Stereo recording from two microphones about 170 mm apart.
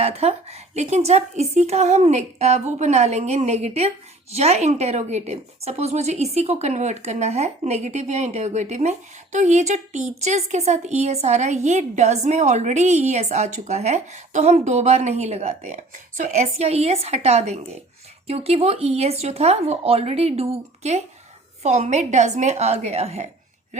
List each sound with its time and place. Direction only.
0.0 s a woman's voice: 35° right (ahead or behind)